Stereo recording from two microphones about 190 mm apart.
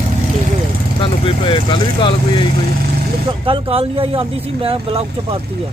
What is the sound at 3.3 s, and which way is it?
Speech, 30° right (ahead or behind).